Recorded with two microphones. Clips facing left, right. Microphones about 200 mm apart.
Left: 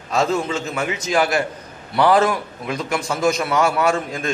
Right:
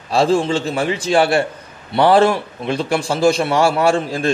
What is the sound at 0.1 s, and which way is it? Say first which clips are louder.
A man's voice: right 5 dB; 30° right (ahead or behind).